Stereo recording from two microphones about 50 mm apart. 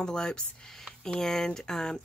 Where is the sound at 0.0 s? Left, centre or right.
Centre.